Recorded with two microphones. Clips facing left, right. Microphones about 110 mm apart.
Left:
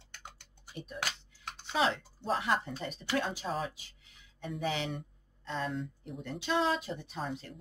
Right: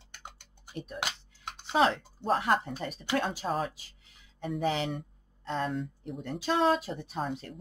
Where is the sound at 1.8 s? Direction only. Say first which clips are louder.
Right 5 dB; 50° right (ahead or behind).